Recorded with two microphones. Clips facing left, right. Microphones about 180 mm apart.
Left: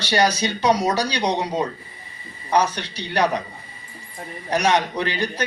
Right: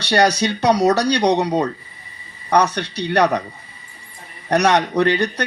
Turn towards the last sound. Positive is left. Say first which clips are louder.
# right 7 dB
turn(degrees=-70)  # may be behind; listen again after turning